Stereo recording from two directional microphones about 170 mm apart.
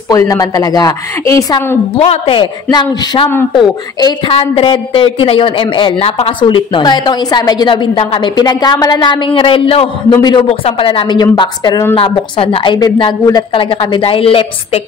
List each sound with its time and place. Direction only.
0.1 s a woman's voice: 20° left (ahead or behind)
2.0 s a woman's voice: 35° left (ahead or behind)